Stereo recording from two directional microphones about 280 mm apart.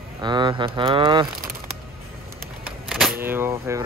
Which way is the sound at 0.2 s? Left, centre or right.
Centre.